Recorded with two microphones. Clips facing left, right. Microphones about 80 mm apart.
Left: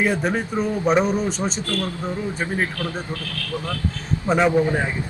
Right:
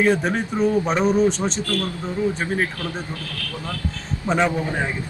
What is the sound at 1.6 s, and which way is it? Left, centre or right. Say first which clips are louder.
Speech: right 1 dB; left.